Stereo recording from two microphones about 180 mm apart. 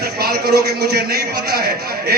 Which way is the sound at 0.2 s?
60° right (ahead or behind).